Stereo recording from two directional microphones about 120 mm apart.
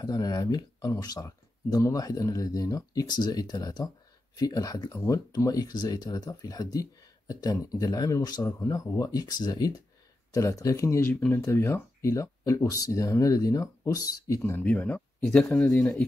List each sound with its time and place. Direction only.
0.0 s speech: 30° left (ahead or behind)
14.6 s speech: 10° left (ahead or behind)